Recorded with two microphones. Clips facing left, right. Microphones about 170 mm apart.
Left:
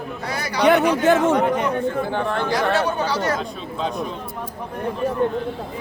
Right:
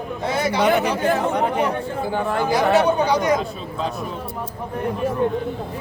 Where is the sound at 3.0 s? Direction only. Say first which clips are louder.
Right 4 dB; 15° right (ahead or behind).